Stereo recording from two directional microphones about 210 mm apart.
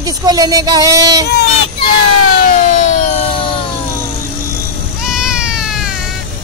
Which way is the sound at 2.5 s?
35° left (ahead or behind).